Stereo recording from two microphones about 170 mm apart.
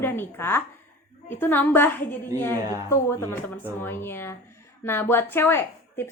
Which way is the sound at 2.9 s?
15° left (ahead or behind).